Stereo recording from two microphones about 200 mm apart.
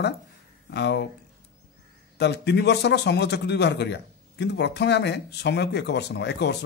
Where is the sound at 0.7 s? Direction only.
60° left (ahead or behind).